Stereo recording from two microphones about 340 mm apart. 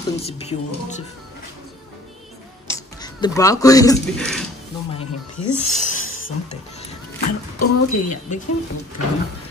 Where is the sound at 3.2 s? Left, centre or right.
Centre.